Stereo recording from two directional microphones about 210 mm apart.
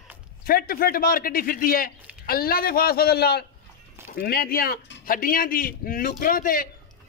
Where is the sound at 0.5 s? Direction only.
45° left (ahead or behind).